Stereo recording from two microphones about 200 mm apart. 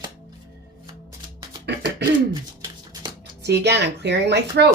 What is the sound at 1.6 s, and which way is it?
Throat clearing, 55° right (ahead or behind).